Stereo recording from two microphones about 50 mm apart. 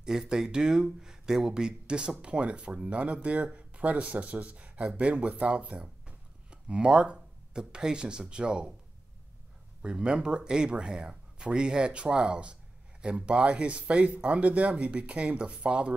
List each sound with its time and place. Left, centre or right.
0.0 s speech: centre
9.8 s speech: centre